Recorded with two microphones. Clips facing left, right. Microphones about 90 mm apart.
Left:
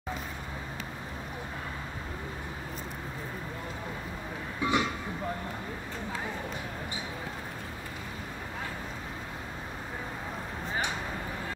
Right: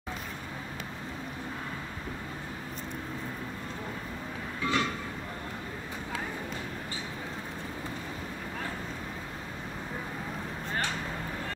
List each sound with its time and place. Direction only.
4.6 s train: 15° left (ahead or behind)